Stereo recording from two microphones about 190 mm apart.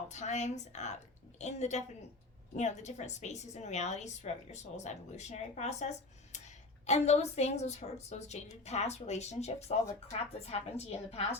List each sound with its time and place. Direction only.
0.1 s a woman's voice: 35° left (ahead or behind)